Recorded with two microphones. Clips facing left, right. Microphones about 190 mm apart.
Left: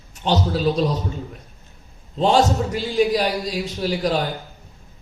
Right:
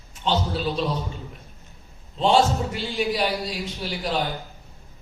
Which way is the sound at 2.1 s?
40° left (ahead or behind).